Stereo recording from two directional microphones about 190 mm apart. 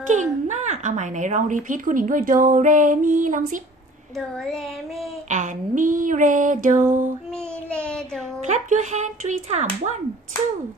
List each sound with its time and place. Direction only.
0.1 s a woman's voice: 40° right (ahead or behind)
4.4 s child singing: centre (ahead or behind)
5.3 s child singing: 40° right (ahead or behind)
7.3 s a sound: 5° left (ahead or behind)
8.5 s speech: 40° right (ahead or behind)